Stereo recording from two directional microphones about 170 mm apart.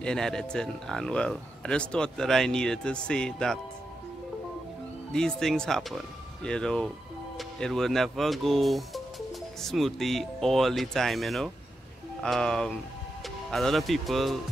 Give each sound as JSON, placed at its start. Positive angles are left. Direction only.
{"t": 0.0, "sound": "speech", "side_deg": 5}
{"t": 5.1, "sound": "speech", "side_deg": 5}